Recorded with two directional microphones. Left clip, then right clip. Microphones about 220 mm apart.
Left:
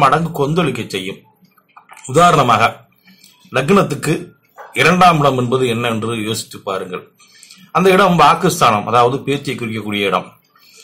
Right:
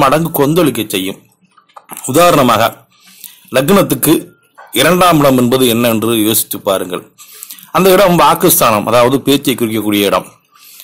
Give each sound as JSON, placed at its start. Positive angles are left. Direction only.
{"t": 0.0, "sound": "a man's voice", "side_deg": -50}
{"t": 3.2, "sound": "a sound", "side_deg": -50}
{"t": 4.7, "sound": "a man's voice", "side_deg": -50}